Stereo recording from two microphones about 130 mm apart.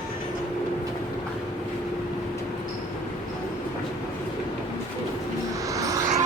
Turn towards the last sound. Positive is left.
turn(degrees=-25)  # may be behind; listen again after turning